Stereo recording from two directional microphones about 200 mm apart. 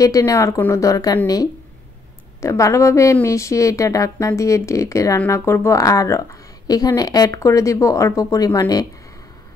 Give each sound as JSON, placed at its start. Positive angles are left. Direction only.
{"t": 0.0, "sound": "a woman's voice", "side_deg": 15}